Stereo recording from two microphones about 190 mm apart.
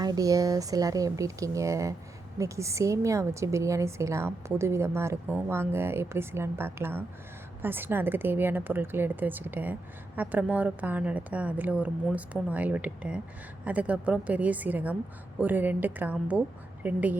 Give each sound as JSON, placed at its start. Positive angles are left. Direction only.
{"t": 0.0, "sound": "a woman's voice", "side_deg": -20}